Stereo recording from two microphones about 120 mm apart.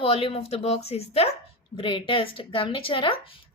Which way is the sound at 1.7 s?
45° left (ahead or behind).